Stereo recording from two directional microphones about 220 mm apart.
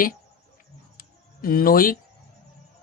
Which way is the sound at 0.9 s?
40° left (ahead or behind).